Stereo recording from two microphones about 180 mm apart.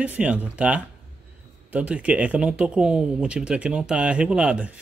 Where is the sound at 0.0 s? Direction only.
10° right (ahead or behind).